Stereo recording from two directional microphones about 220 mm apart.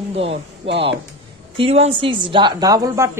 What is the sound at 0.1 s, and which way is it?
Speech, 25° right (ahead or behind).